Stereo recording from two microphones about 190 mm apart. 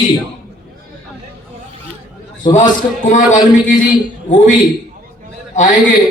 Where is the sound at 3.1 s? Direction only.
40° left (ahead or behind).